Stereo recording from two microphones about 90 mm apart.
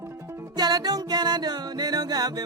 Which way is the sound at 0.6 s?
50° right (ahead or behind).